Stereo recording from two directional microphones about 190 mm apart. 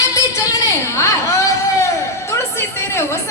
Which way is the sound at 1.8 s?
15° left (ahead or behind).